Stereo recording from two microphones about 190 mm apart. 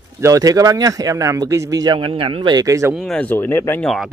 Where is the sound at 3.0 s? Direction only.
5° left (ahead or behind).